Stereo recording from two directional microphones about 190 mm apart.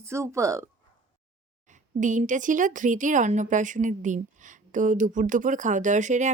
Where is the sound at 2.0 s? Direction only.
40° right (ahead or behind).